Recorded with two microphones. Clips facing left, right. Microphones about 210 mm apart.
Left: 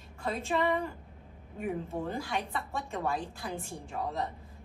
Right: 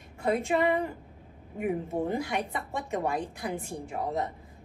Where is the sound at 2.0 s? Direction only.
20° right (ahead or behind).